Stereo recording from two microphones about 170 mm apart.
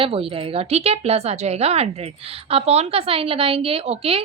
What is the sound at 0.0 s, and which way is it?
A woman's voice, 35° right (ahead or behind).